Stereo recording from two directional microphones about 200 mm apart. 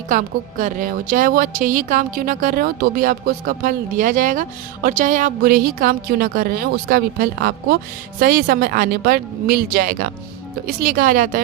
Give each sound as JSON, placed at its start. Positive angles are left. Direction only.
{"t": 0.1, "sound": "a woman's voice", "side_deg": -40}